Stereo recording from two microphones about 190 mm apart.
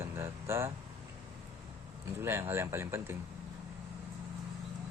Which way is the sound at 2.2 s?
10° right (ahead or behind).